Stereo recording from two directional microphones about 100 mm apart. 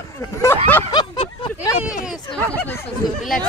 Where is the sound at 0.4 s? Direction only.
30° left (ahead or behind).